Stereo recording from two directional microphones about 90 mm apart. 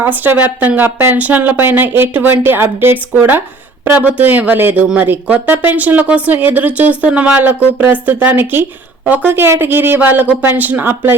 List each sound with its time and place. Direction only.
0.0 s a woman's voice: 20° right (ahead or behind)